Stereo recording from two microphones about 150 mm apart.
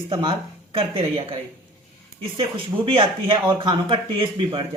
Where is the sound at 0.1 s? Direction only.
35° right (ahead or behind).